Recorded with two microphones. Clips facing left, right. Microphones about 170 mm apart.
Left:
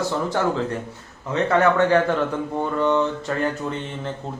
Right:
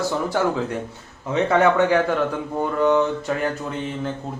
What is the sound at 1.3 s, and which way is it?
Speech, 10° right (ahead or behind).